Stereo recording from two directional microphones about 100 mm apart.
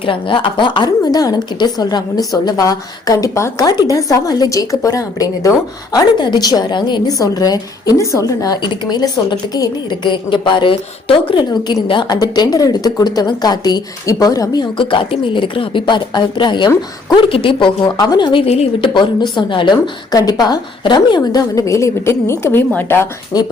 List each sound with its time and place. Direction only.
0.0 s a woman's voice: 60° left (ahead or behind); by 6.0 s 35° left (ahead or behind)
6.1 s speech: 45° left (ahead or behind)
7.9 s a woman's voice: 35° right (ahead or behind)
8.3 s a woman's voice: 35° left (ahead or behind)
8.6 s speech: 50° left (ahead or behind)
11.9 s speech: 50° left (ahead or behind)
17.2 s speech: 60° left (ahead or behind)
17.8 s speech: 40° left (ahead or behind)
18.4 s a woman's voice: 90° left
18.9 s a woman's voice: 50° left (ahead or behind); by 23.0 s 20° left (ahead or behind)